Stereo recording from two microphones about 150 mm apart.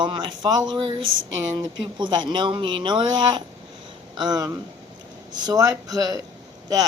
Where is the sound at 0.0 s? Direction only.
30° right (ahead or behind).